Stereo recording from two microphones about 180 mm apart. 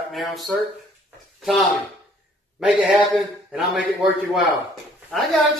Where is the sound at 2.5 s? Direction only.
Centre (ahead or behind).